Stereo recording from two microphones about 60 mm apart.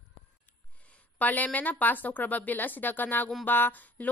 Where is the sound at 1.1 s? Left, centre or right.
Left.